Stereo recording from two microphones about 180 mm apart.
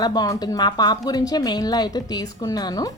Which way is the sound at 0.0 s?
20° left (ahead or behind).